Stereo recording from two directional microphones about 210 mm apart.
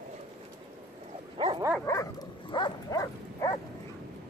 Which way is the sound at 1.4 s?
25° right (ahead or behind).